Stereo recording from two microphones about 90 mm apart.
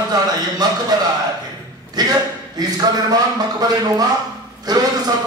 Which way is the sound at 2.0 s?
50° right (ahead or behind).